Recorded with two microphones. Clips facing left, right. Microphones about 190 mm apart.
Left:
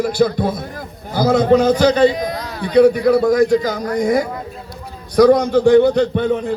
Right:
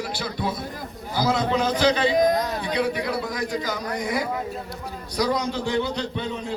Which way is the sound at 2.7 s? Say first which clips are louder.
Left 15 dB; 45° left (ahead or behind).